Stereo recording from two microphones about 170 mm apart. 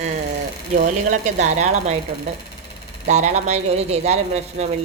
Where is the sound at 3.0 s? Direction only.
45° right (ahead or behind).